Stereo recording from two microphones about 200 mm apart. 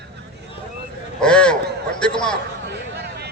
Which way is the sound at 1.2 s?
5° left (ahead or behind).